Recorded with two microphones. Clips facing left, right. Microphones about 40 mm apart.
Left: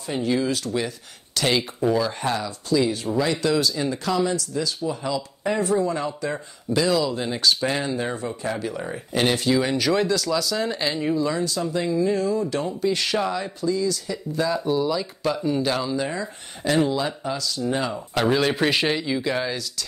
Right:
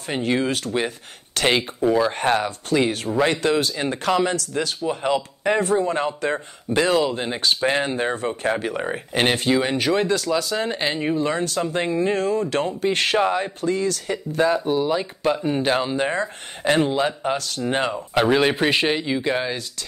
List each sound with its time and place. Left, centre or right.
0.0 s speech: right
17.9 s speech: right